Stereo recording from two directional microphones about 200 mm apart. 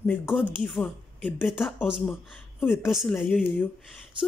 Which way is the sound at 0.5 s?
5° left (ahead or behind).